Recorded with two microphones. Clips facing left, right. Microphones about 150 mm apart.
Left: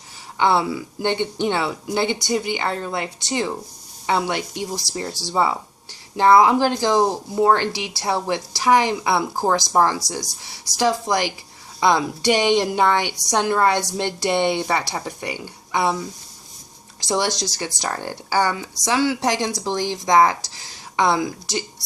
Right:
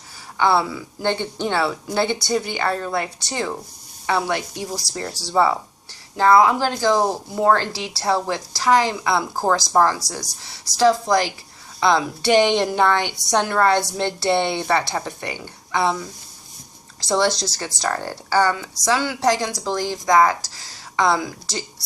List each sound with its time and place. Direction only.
0.3 s a woman's voice: 20° left (ahead or behind)
17.1 s speech: 15° left (ahead or behind)